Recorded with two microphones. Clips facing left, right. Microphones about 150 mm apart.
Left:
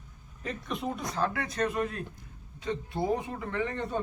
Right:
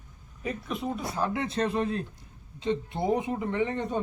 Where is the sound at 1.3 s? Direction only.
25° right (ahead or behind).